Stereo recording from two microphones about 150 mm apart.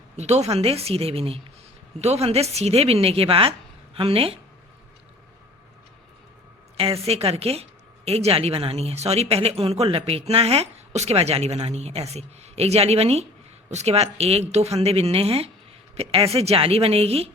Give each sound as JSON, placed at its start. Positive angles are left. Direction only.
{"t": 0.2, "sound": "a woman's voice", "side_deg": -45}
{"t": 6.7, "sound": "a woman's voice", "side_deg": -40}